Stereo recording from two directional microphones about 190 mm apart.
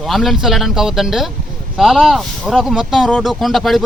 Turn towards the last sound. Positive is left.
turn(degrees=0)  # may be behind; listen again after turning